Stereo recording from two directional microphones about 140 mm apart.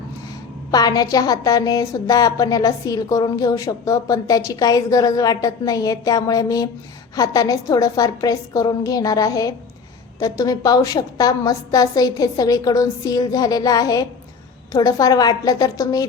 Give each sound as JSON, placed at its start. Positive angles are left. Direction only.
{"t": 0.7, "sound": "a woman's voice", "side_deg": 25}